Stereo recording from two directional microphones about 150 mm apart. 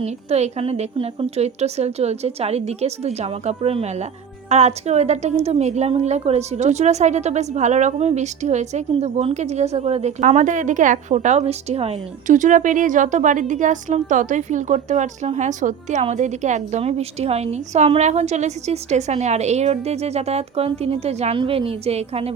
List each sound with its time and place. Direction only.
0.0 s a woman's voice: 45° right (ahead or behind)
12.3 s a woman's voice: 60° right (ahead or behind); by 22.3 s 40° right (ahead or behind)